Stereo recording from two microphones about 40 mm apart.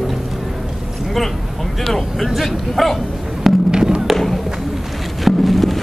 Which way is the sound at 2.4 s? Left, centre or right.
Centre.